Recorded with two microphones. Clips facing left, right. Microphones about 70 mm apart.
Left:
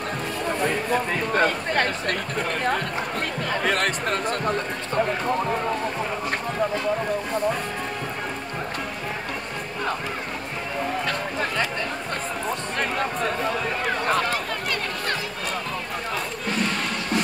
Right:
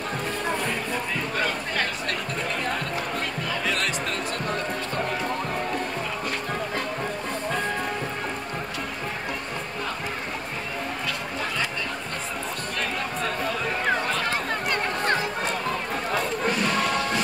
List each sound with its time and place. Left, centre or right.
1.3 s speech: left
3.4 s speech: left